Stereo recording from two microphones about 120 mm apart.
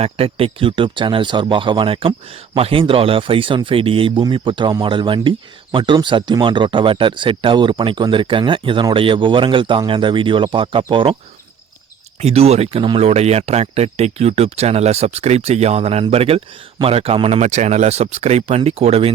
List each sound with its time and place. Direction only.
0.0 s speech: 50° right (ahead or behind)
12.2 s speech: 60° right (ahead or behind)